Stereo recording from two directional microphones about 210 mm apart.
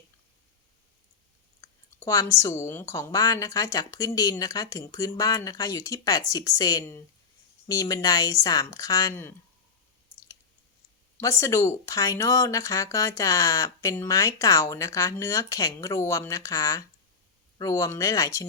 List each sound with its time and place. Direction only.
2.0 s speech: 15° left (ahead or behind)
11.2 s speech: 15° left (ahead or behind)